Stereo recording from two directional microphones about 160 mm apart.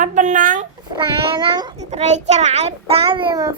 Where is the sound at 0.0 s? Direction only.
50° right (ahead or behind).